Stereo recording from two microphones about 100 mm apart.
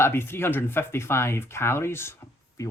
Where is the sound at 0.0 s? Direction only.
25° left (ahead or behind).